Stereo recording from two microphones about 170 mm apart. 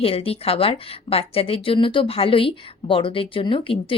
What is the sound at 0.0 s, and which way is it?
A woman's voice, 35° left (ahead or behind).